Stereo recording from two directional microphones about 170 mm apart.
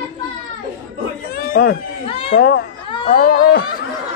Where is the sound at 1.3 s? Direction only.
65° left (ahead or behind).